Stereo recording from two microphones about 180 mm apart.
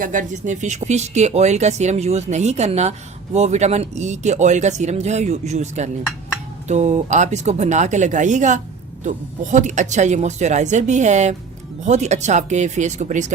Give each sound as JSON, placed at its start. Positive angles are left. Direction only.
{"t": 0.0, "sound": "speech", "side_deg": -45}